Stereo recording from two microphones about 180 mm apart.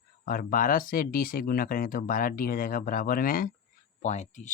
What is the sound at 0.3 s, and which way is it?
Speech, 50° left (ahead or behind).